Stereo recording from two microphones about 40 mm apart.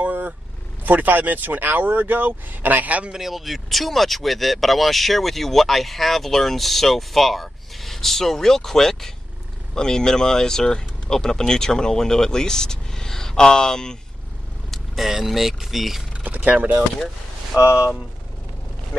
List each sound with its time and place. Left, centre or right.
0.0 s vehicle: right
0.8 s speech: right
3.1 s speech: centre
14.7 s speech: centre
16.2 s a sound: right
16.4 s speech: right